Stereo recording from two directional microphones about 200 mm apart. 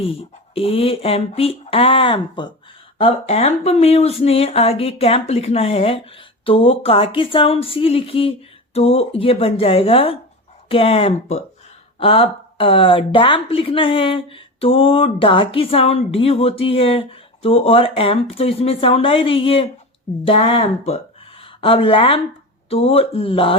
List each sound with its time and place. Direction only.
0.0 s speech: 30° left (ahead or behind)